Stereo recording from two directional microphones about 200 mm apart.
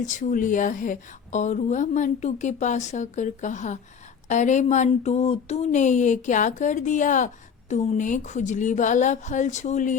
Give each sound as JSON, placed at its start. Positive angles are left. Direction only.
{"t": 0.0, "sound": "speech", "side_deg": 40}